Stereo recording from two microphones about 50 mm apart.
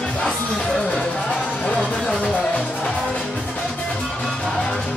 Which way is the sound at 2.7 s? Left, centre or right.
Left.